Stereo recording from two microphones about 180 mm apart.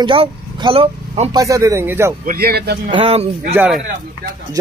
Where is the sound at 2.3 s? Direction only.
60° right (ahead or behind).